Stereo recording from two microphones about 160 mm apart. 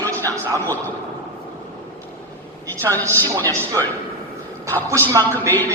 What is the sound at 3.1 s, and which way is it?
Speech, 15° left (ahead or behind).